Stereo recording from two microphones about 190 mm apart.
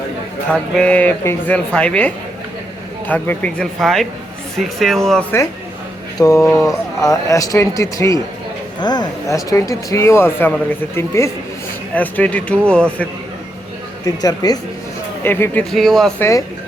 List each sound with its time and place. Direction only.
0.5 s speech: 5° left (ahead or behind)
6.1 s speech: 15° left (ahead or behind)
14.0 s speech: 20° left (ahead or behind)
15.7 s speech: centre (ahead or behind)